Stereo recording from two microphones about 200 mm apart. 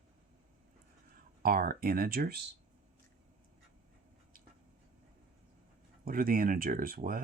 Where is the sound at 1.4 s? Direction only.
45° right (ahead or behind).